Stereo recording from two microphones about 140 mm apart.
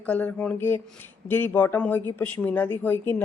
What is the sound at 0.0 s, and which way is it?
Speech, 10° left (ahead or behind).